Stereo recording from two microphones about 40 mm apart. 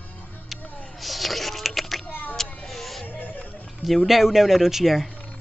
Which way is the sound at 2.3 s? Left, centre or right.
Centre.